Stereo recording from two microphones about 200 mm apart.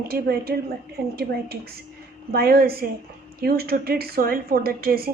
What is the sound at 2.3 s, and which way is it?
A woman's voice, 50° right (ahead or behind).